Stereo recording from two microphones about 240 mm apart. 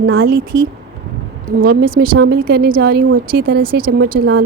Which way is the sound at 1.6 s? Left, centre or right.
Right.